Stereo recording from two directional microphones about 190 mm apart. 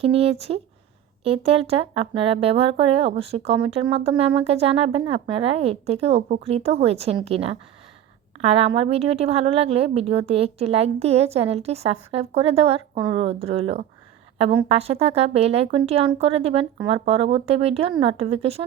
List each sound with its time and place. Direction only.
0.0 s a woman's voice: 30° right (ahead or behind)